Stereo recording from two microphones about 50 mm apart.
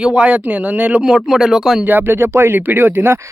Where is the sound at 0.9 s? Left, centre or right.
Centre.